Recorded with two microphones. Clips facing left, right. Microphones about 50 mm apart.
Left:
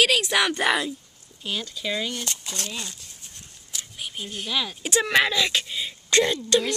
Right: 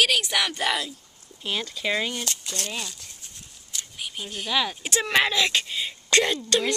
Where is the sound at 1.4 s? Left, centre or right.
Right.